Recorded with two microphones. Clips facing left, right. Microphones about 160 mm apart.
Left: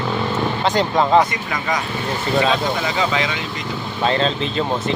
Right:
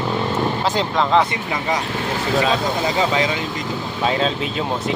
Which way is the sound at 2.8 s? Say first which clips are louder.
Right 2 dB; 35° right (ahead or behind).